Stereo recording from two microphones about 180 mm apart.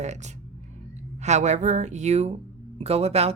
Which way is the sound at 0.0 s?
40° right (ahead or behind).